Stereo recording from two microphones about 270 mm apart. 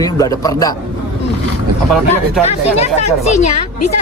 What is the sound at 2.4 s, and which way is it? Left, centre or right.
Speech, left.